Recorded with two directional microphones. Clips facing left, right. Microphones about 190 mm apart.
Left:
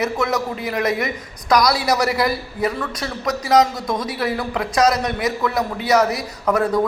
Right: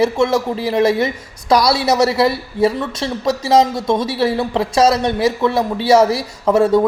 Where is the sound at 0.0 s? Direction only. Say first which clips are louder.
Right 6 dB; 30° right (ahead or behind).